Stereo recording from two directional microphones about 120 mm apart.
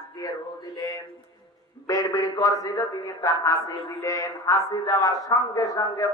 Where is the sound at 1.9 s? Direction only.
30° left (ahead or behind).